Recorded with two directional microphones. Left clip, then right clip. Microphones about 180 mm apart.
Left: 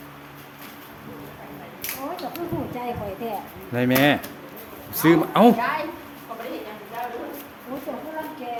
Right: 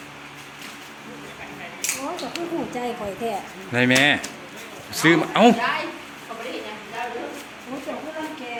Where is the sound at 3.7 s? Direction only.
5° left (ahead or behind).